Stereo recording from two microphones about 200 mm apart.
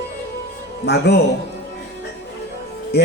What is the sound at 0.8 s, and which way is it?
Speech, 55° left (ahead or behind).